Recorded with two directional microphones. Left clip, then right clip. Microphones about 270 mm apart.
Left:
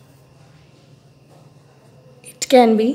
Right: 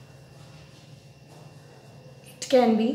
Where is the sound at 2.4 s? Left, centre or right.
Left.